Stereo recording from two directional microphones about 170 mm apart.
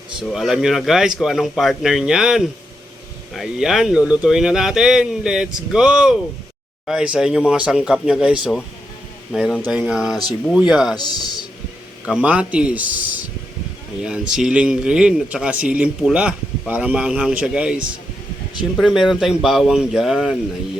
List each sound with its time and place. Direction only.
0.3 s speech: centre (ahead or behind)
10.9 s speech: 25° left (ahead or behind)
12.0 s speech: 5° right (ahead or behind)
18.8 s speech: centre (ahead or behind)